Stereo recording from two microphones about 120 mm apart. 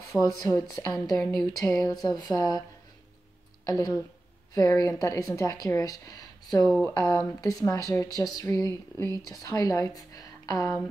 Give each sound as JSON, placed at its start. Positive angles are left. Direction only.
{"t": 0.2, "sound": "speech", "side_deg": 30}
{"t": 1.1, "sound": "speech", "side_deg": 5}
{"t": 1.5, "sound": "speech", "side_deg": 30}
{"t": 1.9, "sound": "a sound", "side_deg": 30}
{"t": 3.6, "sound": "speech", "side_deg": 30}
{"t": 7.9, "sound": "a sound", "side_deg": 30}
{"t": 8.5, "sound": "a woman's voice", "side_deg": 25}